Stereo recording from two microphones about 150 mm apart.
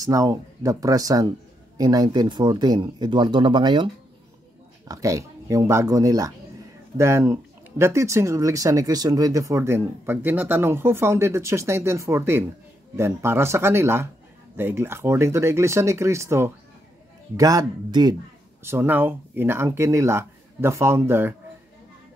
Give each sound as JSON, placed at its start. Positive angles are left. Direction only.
{"t": 0.0, "sound": "speech", "side_deg": -20}
{"t": 18.6, "sound": "speech", "side_deg": -15}